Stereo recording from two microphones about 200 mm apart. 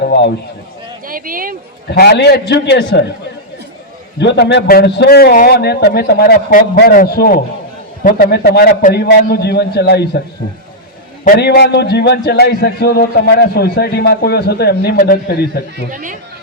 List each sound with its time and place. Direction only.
0.0 s a man's voice: 60° left (ahead or behind)
1.0 s speech: 45° right (ahead or behind)
1.9 s a man's voice: 55° left (ahead or behind)
4.2 s a man's voice: 60° left (ahead or behind)
11.3 s a man's voice: 55° left (ahead or behind)
15.9 s speech: 40° right (ahead or behind)